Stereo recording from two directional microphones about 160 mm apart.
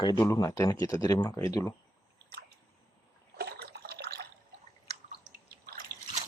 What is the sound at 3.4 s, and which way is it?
Water, 80° right.